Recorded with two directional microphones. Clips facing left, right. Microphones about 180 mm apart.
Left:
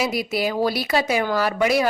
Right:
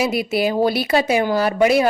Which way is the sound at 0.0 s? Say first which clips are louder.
Right 4 dB; 25° right (ahead or behind).